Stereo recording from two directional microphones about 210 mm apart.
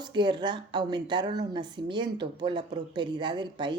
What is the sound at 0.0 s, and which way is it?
A woman's voice, 20° right (ahead or behind).